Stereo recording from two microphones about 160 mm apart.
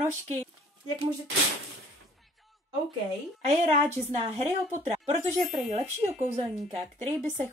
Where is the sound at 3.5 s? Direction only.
40° right (ahead or behind).